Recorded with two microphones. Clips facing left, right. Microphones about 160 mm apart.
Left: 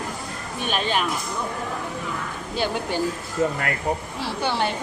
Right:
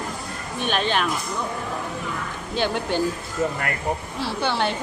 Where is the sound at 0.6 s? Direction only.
5° left (ahead or behind).